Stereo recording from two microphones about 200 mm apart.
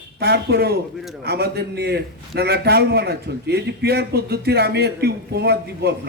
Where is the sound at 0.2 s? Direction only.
50° right (ahead or behind).